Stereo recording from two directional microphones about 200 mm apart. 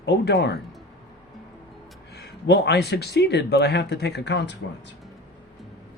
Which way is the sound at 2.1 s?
55° left (ahead or behind).